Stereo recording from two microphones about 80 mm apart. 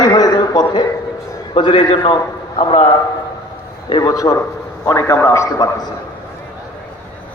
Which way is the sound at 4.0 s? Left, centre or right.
Left.